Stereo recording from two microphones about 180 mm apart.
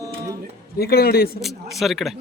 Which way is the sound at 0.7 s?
60° left (ahead or behind).